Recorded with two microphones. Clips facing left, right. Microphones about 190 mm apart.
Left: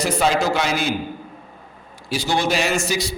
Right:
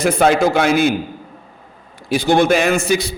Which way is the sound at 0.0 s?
50° right (ahead or behind).